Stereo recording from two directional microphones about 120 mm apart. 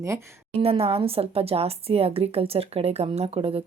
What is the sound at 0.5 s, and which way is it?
Speech, 55° right (ahead or behind).